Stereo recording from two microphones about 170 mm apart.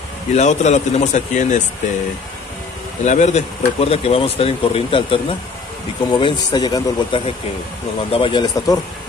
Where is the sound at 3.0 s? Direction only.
45° left (ahead or behind); by 8.8 s 20° left (ahead or behind).